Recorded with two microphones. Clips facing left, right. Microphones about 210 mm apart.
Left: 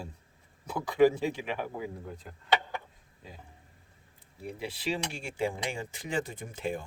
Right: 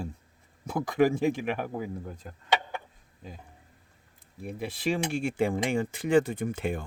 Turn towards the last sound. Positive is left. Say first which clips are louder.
# right 5 dB
turn(degrees=-55)  # may be behind; listen again after turning